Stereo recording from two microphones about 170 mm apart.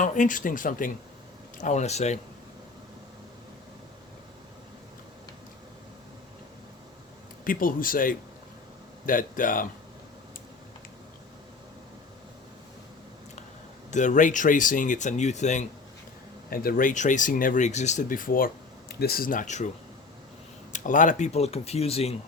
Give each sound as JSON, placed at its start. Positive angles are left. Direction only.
{"t": 0.0, "sound": "speech", "side_deg": 50}
{"t": 7.4, "sound": "speech", "side_deg": 55}
{"t": 13.9, "sound": "speech", "side_deg": 45}
{"t": 16.5, "sound": "speech", "side_deg": 60}
{"t": 20.7, "sound": "speech", "side_deg": 50}